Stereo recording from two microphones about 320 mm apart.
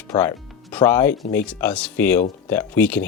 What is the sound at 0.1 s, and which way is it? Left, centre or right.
Speech, centre.